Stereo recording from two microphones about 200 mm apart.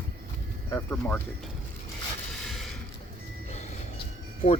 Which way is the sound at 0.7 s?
10° left (ahead or behind).